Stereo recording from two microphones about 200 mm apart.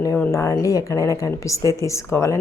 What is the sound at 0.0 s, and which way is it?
A woman's voice, 15° left (ahead or behind).